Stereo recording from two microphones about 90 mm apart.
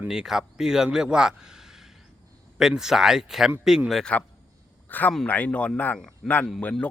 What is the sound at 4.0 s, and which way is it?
Speech, 15° left (ahead or behind).